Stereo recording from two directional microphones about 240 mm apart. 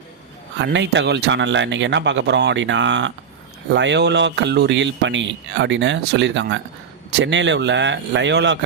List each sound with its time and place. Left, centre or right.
0.6 s speech: right